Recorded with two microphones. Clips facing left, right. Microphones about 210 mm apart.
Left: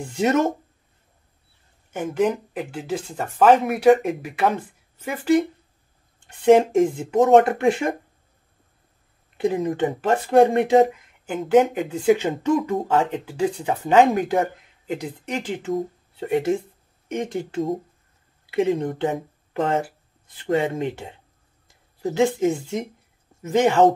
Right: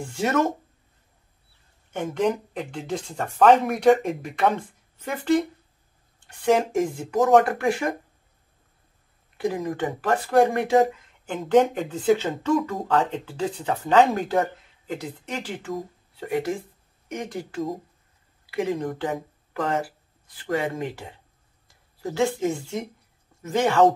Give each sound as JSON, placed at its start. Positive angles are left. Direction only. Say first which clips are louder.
{"t": 0.1, "sound": "speech", "louder": "left 3 dB", "side_deg": 20}
{"t": 1.9, "sound": "speech", "louder": "left 2 dB", "side_deg": 5}
{"t": 6.1, "sound": "speech", "louder": "left 6 dB", "side_deg": 25}
{"t": 9.4, "sound": "speech", "louder": "left 4 dB", "side_deg": 25}
{"t": 11.2, "sound": "speech", "louder": "left 2 dB", "side_deg": 10}